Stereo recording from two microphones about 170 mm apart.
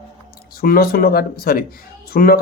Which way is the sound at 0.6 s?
60° left (ahead or behind).